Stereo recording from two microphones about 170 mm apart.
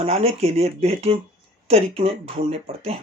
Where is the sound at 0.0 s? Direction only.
35° right (ahead or behind).